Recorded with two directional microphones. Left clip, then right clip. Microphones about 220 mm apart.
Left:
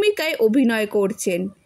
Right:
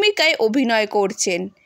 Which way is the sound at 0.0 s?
45° left (ahead or behind).